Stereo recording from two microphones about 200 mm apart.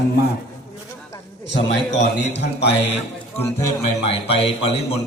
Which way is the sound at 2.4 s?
55° left (ahead or behind).